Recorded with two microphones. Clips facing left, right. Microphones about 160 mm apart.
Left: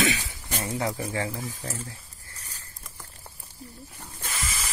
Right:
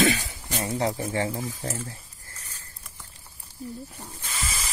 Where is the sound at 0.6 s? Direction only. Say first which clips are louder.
Right 3 dB; 20° right (ahead or behind).